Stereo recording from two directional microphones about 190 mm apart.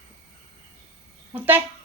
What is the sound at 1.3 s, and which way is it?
Speech, 10° right (ahead or behind).